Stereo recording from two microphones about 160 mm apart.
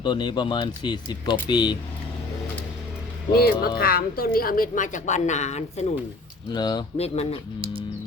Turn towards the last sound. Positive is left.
turn(degrees=40)  # may be behind; listen again after turning